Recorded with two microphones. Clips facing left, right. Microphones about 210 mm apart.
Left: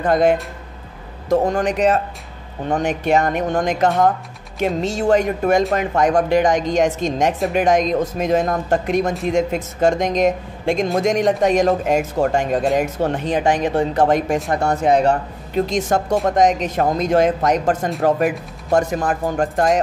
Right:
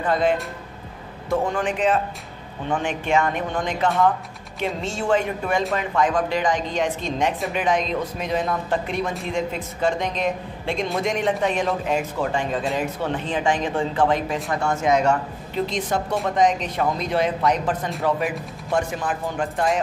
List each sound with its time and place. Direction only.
0.0 s speech: 45° left (ahead or behind)
1.3 s speech: 40° left (ahead or behind)
15.5 s speech: 45° left (ahead or behind)